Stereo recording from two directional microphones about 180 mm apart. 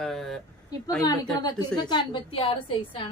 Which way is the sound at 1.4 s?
25° left (ahead or behind).